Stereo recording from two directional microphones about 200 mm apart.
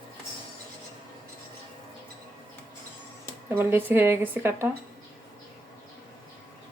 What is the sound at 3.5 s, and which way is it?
Speech, 10° right (ahead or behind).